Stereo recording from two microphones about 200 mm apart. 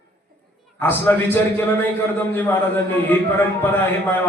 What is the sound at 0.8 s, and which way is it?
A man's voice, 10° left (ahead or behind).